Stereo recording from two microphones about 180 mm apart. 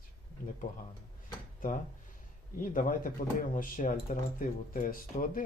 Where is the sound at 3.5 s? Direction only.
50° left (ahead or behind).